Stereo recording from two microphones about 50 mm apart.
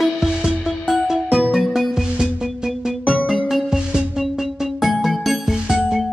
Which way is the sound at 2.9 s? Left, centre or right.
Right.